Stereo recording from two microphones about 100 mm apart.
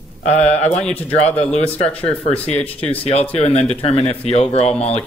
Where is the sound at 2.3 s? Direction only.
90° left.